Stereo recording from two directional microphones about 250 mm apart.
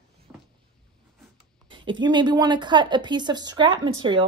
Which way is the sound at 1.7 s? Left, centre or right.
Centre.